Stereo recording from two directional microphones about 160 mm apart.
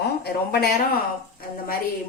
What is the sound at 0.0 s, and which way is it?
Speech, 80° left.